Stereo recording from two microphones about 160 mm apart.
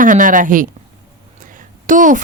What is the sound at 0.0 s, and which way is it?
A woman's voice, 55° right (ahead or behind).